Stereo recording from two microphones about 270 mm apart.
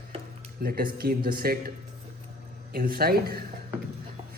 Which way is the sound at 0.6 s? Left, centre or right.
Right.